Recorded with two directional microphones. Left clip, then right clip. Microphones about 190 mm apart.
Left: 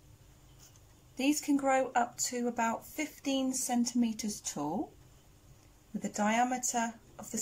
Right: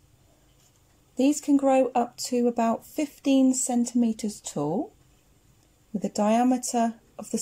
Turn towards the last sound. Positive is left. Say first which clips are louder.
# right 8 dB
turn(degrees=-25)  # may be behind; listen again after turning